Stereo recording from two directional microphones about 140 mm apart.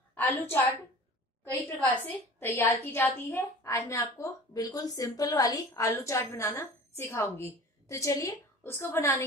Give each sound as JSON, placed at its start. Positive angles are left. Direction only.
{"t": 0.1, "sound": "a woman's voice", "side_deg": 15}